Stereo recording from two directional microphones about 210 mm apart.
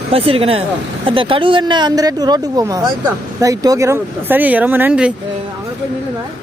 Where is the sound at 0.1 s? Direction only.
25° right (ahead or behind); by 5.1 s 5° right (ahead or behind).